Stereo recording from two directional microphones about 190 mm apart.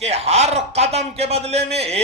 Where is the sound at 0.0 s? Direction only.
35° right (ahead or behind).